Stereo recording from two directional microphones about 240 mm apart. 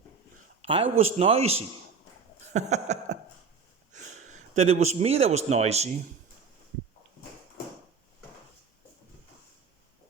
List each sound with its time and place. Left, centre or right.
0.6 s a man's voice: right